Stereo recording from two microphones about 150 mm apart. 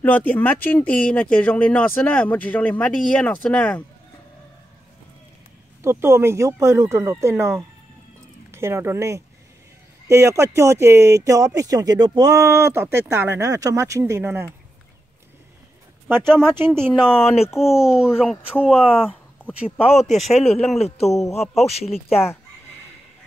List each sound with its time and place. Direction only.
0.0 s speech: 10° left (ahead or behind)
5.8 s speech: 15° right (ahead or behind)
16.3 s a child's voice: 5° left (ahead or behind)
17.6 s a child's voice: 5° right (ahead or behind)
19.8 s a man's voice: 45° left (ahead or behind)
20.1 s a child's voice: centre (ahead or behind)
21.3 s a man's voice: 45° left (ahead or behind)
21.8 s a child's voice: centre (ahead or behind)